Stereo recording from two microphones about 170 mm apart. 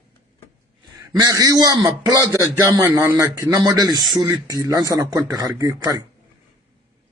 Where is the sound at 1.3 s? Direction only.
20° right (ahead or behind).